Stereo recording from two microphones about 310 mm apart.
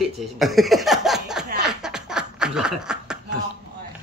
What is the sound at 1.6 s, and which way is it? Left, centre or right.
Snicker, centre.